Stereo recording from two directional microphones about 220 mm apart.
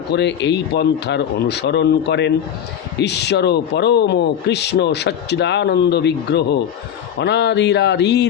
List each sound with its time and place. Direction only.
0.1 s speech: 50° left (ahead or behind)